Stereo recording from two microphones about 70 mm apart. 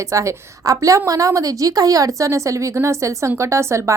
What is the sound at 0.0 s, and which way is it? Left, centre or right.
A woman's voice, right.